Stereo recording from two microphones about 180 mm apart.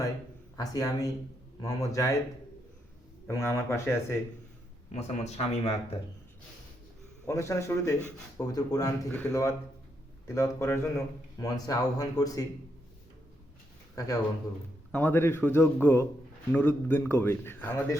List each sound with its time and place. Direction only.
0.5 s speech: 20° left (ahead or behind)
3.2 s speech: 15° left (ahead or behind)
4.9 s speech: 40° left (ahead or behind)
7.3 s speech: 15° left (ahead or behind)
14.0 s speech: 20° left (ahead or behind)